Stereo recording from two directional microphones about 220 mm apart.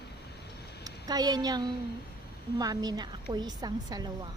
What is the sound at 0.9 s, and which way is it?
A woman's voice, 15° right (ahead or behind).